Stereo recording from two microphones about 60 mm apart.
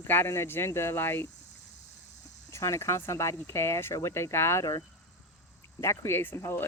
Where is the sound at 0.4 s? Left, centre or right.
Left.